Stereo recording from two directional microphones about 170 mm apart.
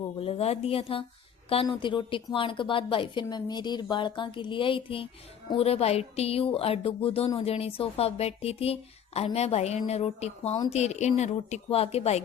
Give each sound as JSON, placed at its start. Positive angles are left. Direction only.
{"t": 0.2, "sound": "a woman's voice", "side_deg": 35}